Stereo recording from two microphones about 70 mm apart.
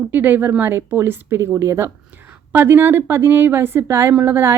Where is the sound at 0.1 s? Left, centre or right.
Right.